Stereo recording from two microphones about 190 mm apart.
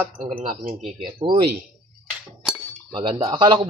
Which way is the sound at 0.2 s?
40° right (ahead or behind).